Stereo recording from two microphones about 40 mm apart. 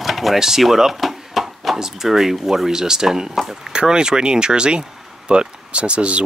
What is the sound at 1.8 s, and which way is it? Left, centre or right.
Speech, centre.